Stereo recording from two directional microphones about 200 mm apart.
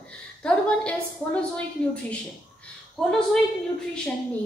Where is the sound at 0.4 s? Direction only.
5° left (ahead or behind).